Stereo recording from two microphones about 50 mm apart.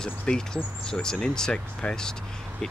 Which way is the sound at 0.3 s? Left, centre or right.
Left.